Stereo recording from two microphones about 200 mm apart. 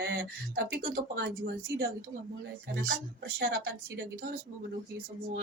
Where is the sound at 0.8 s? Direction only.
55° right (ahead or behind).